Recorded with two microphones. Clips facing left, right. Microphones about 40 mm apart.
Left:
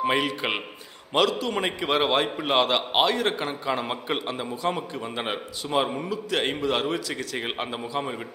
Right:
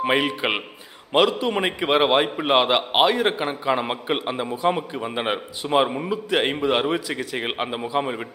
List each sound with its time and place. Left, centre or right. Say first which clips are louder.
0.0 s a man's voice: right 3 dB; centre